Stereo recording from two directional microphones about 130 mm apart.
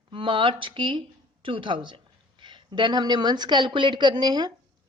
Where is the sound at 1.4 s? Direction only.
40° right (ahead or behind).